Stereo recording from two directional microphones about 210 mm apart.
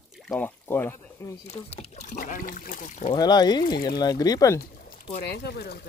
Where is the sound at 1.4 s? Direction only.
30° left (ahead or behind).